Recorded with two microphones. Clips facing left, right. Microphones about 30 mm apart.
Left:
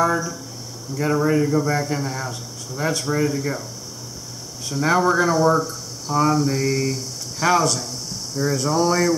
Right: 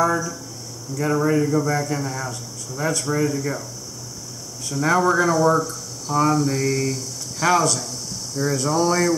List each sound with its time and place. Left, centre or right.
0.0 s speech: centre
1.7 s a man's voice: centre
4.6 s speech: centre